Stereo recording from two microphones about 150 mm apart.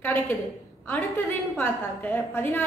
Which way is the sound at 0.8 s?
15° left (ahead or behind).